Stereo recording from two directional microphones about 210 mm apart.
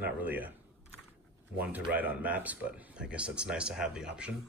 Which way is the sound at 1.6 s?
5° right (ahead or behind).